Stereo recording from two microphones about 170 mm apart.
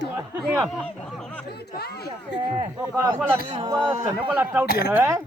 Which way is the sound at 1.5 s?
70° left (ahead or behind).